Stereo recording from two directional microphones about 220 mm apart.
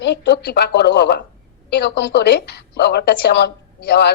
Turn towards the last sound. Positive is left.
turn(degrees=50)  # may be behind; listen again after turning